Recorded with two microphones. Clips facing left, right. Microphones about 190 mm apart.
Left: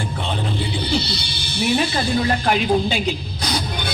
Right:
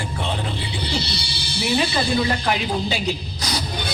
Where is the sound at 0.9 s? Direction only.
55° left (ahead or behind).